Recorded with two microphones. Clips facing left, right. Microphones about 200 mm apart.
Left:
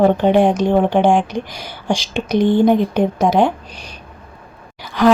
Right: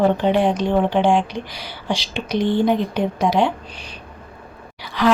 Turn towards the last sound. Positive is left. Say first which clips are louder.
# left 5 dB
turn(degrees=45)  # may be behind; listen again after turning